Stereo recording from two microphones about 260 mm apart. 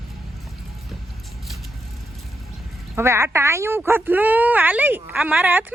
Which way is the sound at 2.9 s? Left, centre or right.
Centre.